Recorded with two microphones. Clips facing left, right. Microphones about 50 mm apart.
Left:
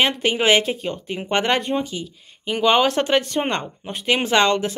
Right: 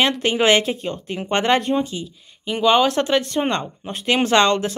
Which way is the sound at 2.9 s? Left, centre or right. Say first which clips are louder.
Even; left.